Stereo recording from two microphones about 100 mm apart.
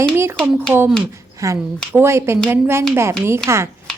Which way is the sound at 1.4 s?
35° right (ahead or behind).